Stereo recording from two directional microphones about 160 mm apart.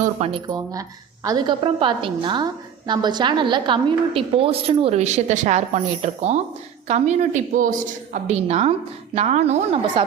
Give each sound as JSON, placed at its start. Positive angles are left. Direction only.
{"t": 0.3, "sound": "speech", "side_deg": -30}
{"t": 1.6, "sound": "a woman's voice", "side_deg": -30}